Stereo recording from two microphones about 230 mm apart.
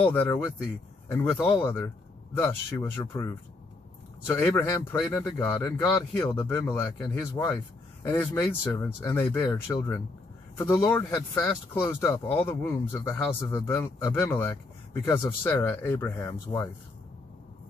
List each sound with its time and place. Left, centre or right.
0.0 s speech: centre
1.5 s speech: centre
4.4 s speech: centre